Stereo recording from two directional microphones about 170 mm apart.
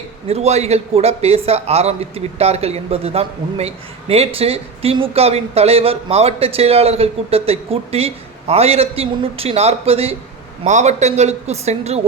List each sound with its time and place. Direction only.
0.3 s a man's voice: 40° right (ahead or behind)